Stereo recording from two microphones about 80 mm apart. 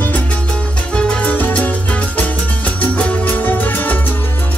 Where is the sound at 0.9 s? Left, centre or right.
Centre.